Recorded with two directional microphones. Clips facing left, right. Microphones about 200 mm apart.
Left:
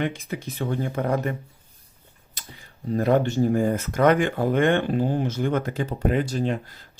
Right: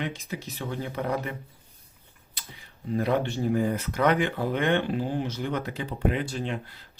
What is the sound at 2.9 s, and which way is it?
Speech, 45° left (ahead or behind).